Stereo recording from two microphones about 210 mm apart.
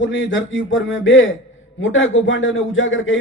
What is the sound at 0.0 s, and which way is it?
A man's voice, 65° left (ahead or behind).